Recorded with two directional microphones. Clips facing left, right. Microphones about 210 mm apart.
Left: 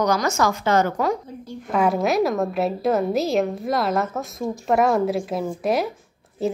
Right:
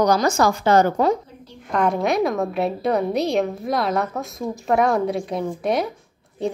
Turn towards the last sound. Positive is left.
turn(degrees=5)  # may be behind; listen again after turning